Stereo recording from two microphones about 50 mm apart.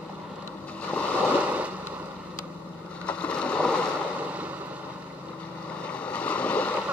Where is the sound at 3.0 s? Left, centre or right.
Left.